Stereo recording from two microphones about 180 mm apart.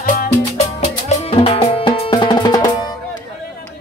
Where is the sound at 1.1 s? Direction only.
35° left (ahead or behind).